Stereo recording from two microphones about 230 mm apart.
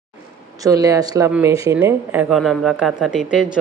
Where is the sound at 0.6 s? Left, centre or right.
Centre.